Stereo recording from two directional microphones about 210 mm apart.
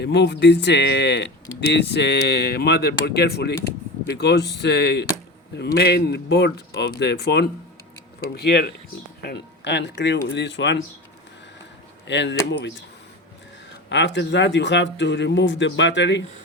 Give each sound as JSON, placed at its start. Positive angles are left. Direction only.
{"t": 0.0, "sound": "speech", "side_deg": 55}
{"t": 12.0, "sound": "speech", "side_deg": 55}
{"t": 13.9, "sound": "speech", "side_deg": 60}